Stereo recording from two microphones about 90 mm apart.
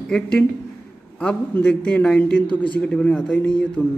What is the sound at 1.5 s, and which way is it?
Speech, 15° left (ahead or behind).